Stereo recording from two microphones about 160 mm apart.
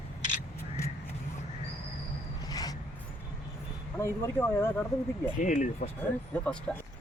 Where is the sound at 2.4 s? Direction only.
25° left (ahead or behind).